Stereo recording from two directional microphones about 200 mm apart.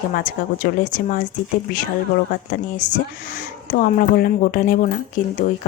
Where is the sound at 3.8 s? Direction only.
45° left (ahead or behind).